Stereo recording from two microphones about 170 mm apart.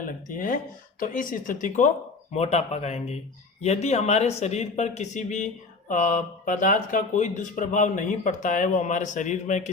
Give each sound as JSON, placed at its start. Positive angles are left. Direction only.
{"t": 0.3, "sound": "speech", "side_deg": 50}
{"t": 2.3, "sound": "speech", "side_deg": 40}